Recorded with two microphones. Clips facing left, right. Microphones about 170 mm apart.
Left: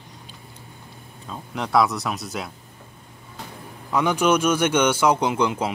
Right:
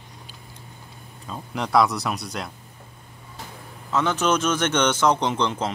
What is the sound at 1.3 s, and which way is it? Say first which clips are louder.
Speech: even; centre (ahead or behind).